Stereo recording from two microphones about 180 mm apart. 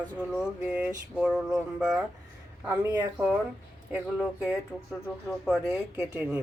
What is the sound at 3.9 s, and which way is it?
Speech, 5° right (ahead or behind).